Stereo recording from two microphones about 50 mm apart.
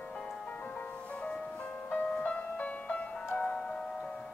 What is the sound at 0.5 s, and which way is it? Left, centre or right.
Music, left.